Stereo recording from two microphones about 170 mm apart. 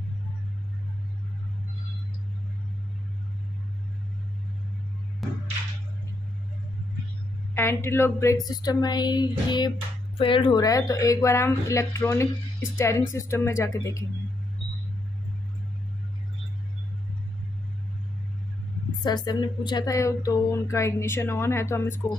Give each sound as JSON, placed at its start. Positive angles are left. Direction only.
{"t": 5.2, "sound": "music", "side_deg": 0}
{"t": 7.5, "sound": "speech", "side_deg": 15}
{"t": 19.0, "sound": "speech", "side_deg": 25}